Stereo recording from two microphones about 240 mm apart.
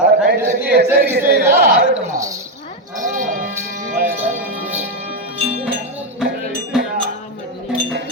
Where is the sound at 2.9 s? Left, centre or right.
Right.